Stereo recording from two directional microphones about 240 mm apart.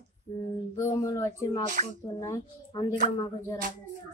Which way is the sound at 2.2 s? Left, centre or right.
Centre.